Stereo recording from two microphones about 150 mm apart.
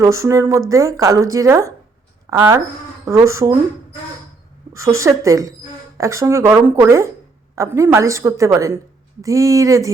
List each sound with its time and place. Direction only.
0.0 s a woman's voice: 20° right (ahead or behind)
4.7 s a woman's voice: 20° right (ahead or behind)